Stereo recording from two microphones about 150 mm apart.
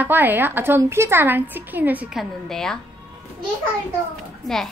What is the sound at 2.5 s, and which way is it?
Speech, 5° left (ahead or behind).